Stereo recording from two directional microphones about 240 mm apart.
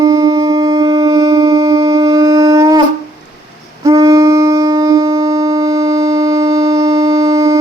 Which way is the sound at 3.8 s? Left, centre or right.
Centre.